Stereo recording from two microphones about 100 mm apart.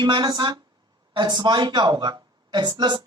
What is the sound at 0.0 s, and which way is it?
A woman's voice, 45° right (ahead or behind).